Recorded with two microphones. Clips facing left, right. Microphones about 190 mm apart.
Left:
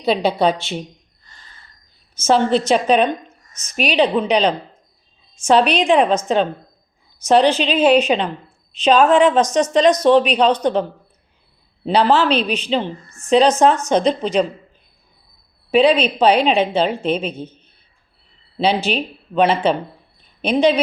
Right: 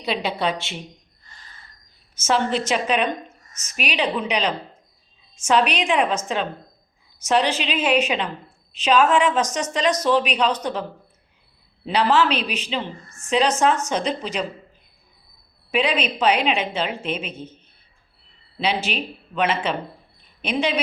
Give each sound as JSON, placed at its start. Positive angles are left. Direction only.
{"t": 0.0, "sound": "a woman's voice", "side_deg": 35}
{"t": 2.1, "sound": "a woman's voice", "side_deg": 30}
{"t": 11.9, "sound": "a woman's voice", "side_deg": 35}
{"t": 15.7, "sound": "a woman's voice", "side_deg": 30}
{"t": 18.9, "sound": "a woman's voice", "side_deg": 35}